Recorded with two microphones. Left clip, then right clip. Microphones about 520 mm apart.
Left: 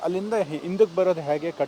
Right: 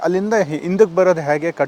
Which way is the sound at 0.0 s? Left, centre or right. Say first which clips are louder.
Right 8 dB; right.